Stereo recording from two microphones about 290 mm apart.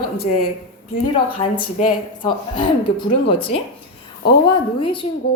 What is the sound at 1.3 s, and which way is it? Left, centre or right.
A woman's voice, left.